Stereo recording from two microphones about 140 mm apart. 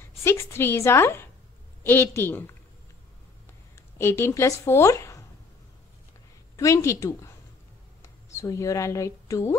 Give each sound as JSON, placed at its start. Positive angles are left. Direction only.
{"t": 0.2, "sound": "a woman's voice", "side_deg": 20}
{"t": 4.0, "sound": "a woman's voice", "side_deg": 20}
{"t": 6.5, "sound": "a woman's voice", "side_deg": 20}